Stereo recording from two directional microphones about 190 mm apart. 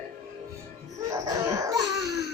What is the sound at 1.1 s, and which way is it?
Laughter, 15° right (ahead or behind).